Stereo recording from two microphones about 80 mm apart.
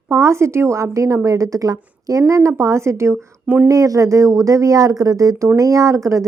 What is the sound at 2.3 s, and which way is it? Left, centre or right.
A woman's voice, right.